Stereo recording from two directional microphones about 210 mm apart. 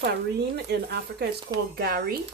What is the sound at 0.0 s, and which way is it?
Speech, 50° right (ahead or behind).